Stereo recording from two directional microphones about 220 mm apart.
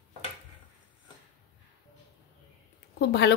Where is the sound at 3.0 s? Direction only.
50° left (ahead or behind).